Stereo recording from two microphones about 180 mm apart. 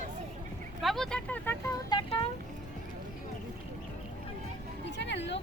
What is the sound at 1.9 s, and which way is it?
Speech, 25° left (ahead or behind).